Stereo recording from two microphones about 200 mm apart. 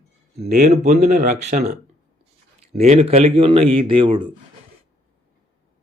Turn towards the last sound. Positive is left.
turn(degrees=-25)  # may be behind; listen again after turning